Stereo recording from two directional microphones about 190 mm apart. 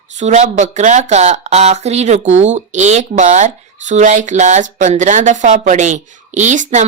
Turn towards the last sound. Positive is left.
turn(degrees=-40)  # may be behind; listen again after turning